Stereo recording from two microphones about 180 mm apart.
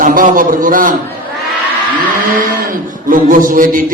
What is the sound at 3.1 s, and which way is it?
Speech, 50° right (ahead or behind).